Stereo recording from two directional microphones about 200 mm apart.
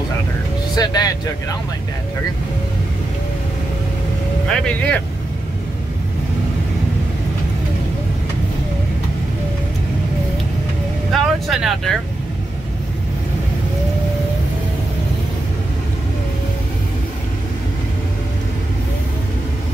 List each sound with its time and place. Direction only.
0.7 s speech: 20° left (ahead or behind)
4.5 s speech: 5° left (ahead or behind)
11.1 s speech: centre (ahead or behind)